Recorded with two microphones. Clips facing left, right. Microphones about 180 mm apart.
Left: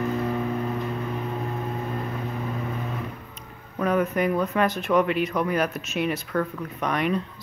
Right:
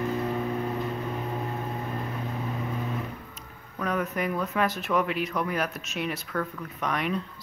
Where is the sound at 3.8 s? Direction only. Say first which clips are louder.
Left 6 dB; centre (ahead or behind).